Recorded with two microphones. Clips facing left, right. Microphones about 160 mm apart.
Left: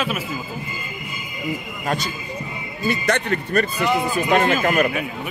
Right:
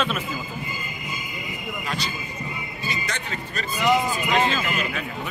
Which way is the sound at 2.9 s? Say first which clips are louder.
Left 11 dB; 60° left (ahead or behind).